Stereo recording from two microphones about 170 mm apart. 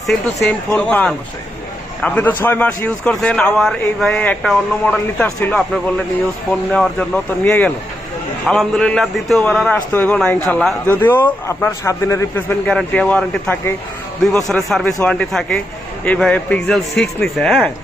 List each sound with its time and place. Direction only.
0.3 s a man's voice: 10° left (ahead or behind)
10.8 s a man's voice: 10° left (ahead or behind)
12.6 s a man's voice: 5° left (ahead or behind)